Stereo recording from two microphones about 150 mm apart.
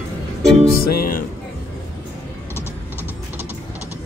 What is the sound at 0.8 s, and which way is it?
Music, 85° left.